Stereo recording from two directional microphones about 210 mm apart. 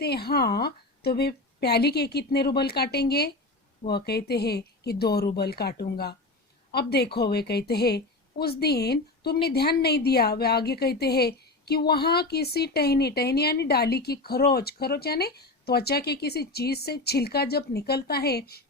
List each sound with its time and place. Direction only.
0.0 s a woman's voice: 50° left (ahead or behind)